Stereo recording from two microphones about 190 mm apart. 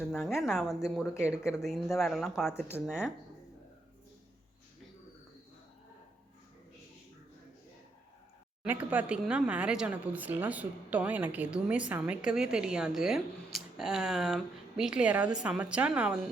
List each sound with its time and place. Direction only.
0.0 s a woman's voice: centre (ahead or behind)
1.0 s speech: 15° left (ahead or behind)
1.5 s a woman's voice: centre (ahead or behind)
8.6 s a woman's voice: 10° right (ahead or behind)